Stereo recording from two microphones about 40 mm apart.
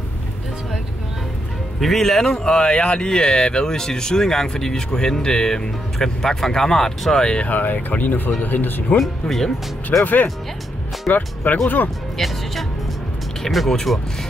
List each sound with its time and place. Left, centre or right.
1.8 s speech: centre
7.4 s speech: left
8.9 s speech: centre
10.0 s speech: left
12.2 s speech: centre
13.5 s speech: centre
13.9 s music: centre